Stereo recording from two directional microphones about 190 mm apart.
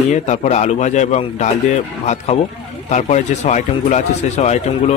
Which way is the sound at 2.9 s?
40° left (ahead or behind).